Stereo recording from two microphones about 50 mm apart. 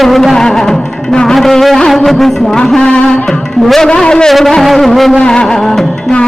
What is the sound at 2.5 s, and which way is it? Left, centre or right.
A man's voice, centre.